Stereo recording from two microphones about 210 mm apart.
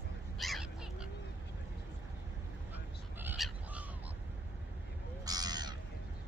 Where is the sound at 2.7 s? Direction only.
10° right (ahead or behind).